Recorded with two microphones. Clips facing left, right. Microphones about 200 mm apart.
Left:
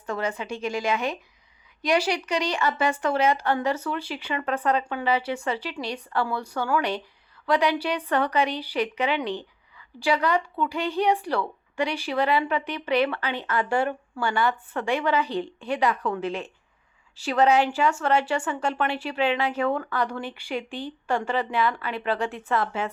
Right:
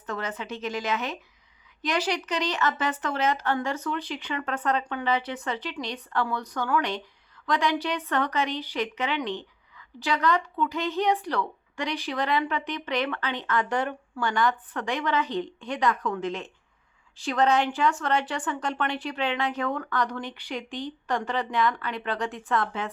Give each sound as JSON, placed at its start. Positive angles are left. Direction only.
{"t": 0.0, "sound": "a woman's voice", "side_deg": 10}